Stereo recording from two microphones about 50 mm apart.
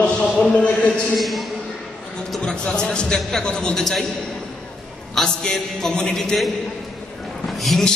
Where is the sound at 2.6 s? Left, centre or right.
Centre.